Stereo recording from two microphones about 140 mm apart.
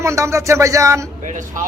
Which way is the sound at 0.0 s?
20° right (ahead or behind).